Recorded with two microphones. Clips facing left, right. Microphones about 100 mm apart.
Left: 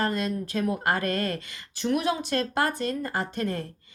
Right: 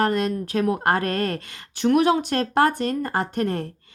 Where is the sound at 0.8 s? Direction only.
45° right (ahead or behind).